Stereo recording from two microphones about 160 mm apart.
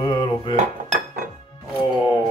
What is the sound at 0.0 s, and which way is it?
Dishes, 30° left (ahead or behind).